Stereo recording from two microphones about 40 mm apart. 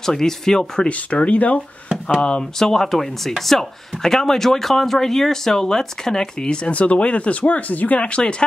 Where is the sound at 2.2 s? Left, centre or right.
Left.